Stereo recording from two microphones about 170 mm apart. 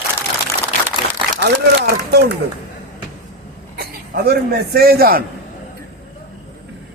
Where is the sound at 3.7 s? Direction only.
65° right (ahead or behind).